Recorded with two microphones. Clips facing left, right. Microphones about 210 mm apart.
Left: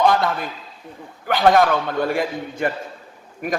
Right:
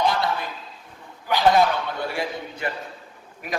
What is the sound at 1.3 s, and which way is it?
A man's voice, 50° left (ahead or behind).